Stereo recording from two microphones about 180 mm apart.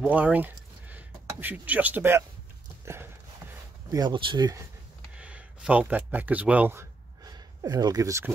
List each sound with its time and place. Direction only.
0.0 s speech: 10° right (ahead or behind)
2.8 s clip-clop: 15° right (ahead or behind)
3.9 s speech: 25° right (ahead or behind)
5.1 s a sound: 5° right (ahead or behind)